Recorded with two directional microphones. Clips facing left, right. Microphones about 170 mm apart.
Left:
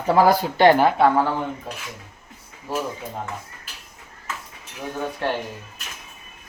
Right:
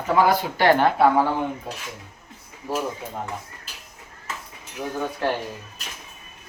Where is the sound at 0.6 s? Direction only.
25° left (ahead or behind).